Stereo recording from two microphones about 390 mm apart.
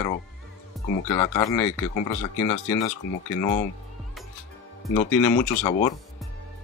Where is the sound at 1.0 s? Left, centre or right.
Centre.